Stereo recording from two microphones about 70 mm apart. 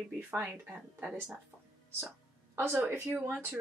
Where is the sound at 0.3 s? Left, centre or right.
Right.